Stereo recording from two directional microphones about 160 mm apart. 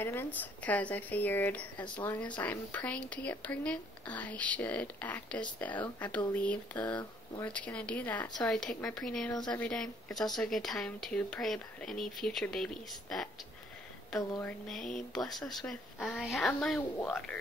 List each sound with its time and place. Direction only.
0.0 s speech: 15° left (ahead or behind)
9.3 s speech: 25° left (ahead or behind)
9.6 s speech: 5° left (ahead or behind)
14.4 s speech: 5° left (ahead or behind)